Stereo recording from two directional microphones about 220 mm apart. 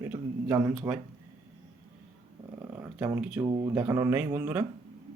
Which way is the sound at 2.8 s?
5° right (ahead or behind).